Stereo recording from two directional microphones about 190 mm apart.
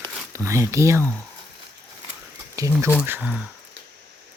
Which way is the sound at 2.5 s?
15° right (ahead or behind).